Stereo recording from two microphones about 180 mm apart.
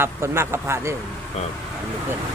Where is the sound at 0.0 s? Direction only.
15° right (ahead or behind).